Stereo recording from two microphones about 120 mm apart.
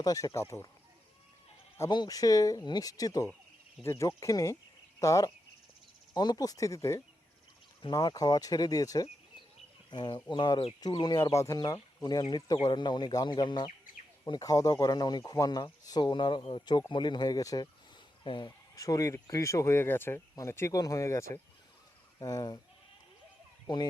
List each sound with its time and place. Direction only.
0.0 s speech: 30° left (ahead or behind)
1.9 s speech: 35° left (ahead or behind)
7.8 s speech: 35° left (ahead or behind)
18.2 s speech: 40° left (ahead or behind)
18.8 s speech: 30° left (ahead or behind)
23.6 s speech: 35° left (ahead or behind)